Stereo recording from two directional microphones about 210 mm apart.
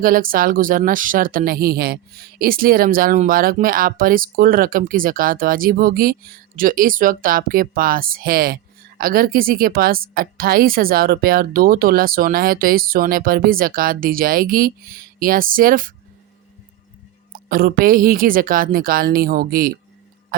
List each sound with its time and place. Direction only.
0.0 s speech: 40° right (ahead or behind)
17.3 s speech: 45° right (ahead or behind)